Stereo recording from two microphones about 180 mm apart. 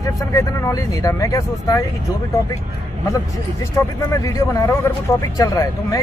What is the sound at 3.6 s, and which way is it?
A man's voice, 15° left (ahead or behind).